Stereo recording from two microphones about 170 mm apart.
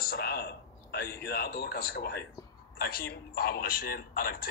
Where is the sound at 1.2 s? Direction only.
65° left (ahead or behind).